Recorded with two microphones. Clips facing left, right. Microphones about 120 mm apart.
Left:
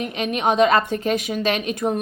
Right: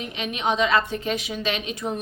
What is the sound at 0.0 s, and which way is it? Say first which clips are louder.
A woman's voice: left 5 dB; 50° left (ahead or behind).